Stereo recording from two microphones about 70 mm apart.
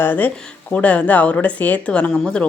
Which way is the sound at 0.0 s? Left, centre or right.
Left.